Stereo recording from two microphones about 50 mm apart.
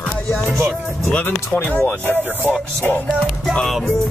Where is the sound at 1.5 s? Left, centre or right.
Left.